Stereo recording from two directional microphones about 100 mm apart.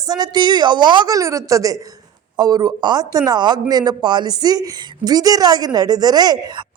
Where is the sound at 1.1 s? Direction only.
35° right (ahead or behind).